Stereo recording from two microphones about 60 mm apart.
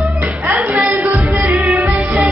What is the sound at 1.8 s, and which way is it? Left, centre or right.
Music, right.